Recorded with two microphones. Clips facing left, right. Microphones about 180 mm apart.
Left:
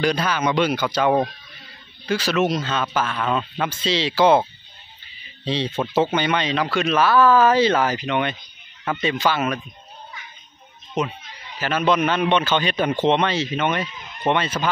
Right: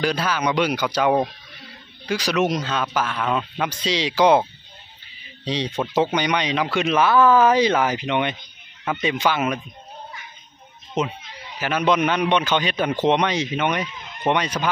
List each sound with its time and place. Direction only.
0.0 s speech: 5° right (ahead or behind)
5.4 s speech: 15° right (ahead or behind)
11.0 s speech: 20° right (ahead or behind)